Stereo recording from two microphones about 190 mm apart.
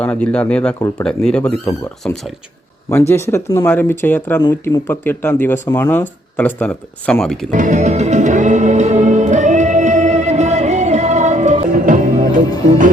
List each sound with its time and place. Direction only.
0.0 s speech: 5° left (ahead or behind)
4.4 s speech: 20° left (ahead or behind); by 7.3 s 5° left (ahead or behind)
7.5 s music: 40° right (ahead or behind)